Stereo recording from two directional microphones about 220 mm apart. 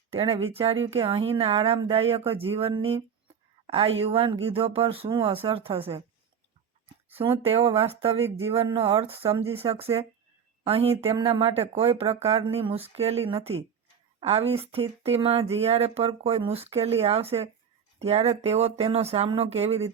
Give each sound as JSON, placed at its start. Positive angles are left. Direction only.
{"t": 0.1, "sound": "a woman's voice", "side_deg": -25}